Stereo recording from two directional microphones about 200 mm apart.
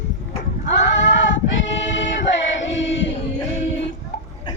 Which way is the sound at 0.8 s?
65° left (ahead or behind).